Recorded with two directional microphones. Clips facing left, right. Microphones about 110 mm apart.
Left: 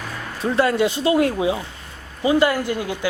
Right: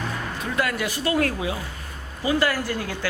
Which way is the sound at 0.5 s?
30° left (ahead or behind).